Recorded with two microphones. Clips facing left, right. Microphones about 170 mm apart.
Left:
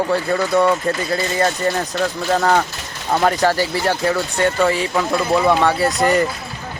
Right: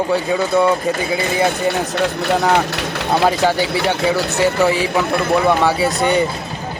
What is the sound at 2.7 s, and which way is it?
Speech, 75° right (ahead or behind).